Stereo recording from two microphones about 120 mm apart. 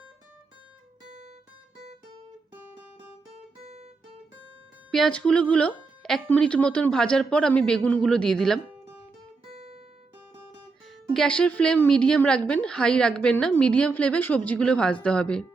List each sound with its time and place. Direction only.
3.6 s guitar: 65° right (ahead or behind)
4.9 s a woman's voice: 5° left (ahead or behind)
9.5 s guitar: 55° right (ahead or behind)
11.1 s a woman's voice: 5° left (ahead or behind)